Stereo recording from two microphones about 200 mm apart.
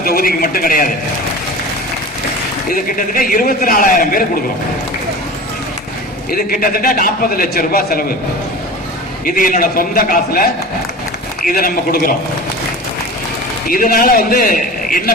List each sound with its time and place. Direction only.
0.0 s a man's voice: 45° left (ahead or behind)
2.6 s a man's voice: 45° left (ahead or behind)
6.3 s a man's voice: 45° left (ahead or behind)
9.3 s a man's voice: 45° left (ahead or behind)
13.7 s a man's voice: 45° left (ahead or behind)